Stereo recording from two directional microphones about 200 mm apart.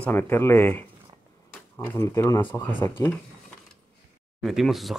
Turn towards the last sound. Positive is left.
turn(degrees=0)  # may be behind; listen again after turning